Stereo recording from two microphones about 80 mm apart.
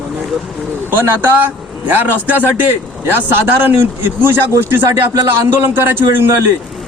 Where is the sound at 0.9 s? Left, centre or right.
Right.